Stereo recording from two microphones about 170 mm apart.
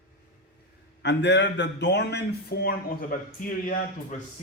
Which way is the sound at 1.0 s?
90° left.